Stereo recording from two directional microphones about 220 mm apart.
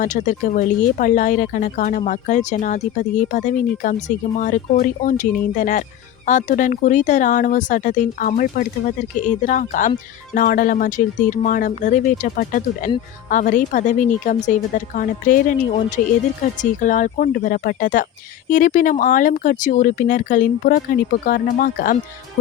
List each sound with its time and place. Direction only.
0.0 s speech: 35° left (ahead or behind)